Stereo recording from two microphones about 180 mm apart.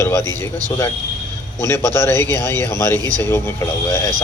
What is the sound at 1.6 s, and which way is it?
A man's voice, 15° left (ahead or behind).